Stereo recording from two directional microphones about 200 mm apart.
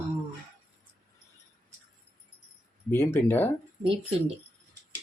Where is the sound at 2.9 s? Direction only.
10° left (ahead or behind).